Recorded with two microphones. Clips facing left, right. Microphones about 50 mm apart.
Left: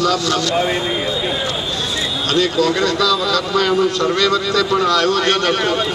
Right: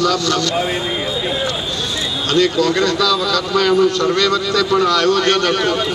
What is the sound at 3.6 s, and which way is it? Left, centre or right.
Speech, left.